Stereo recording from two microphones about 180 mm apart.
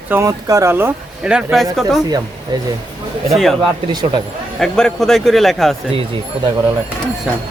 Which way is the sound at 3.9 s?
25° right (ahead or behind).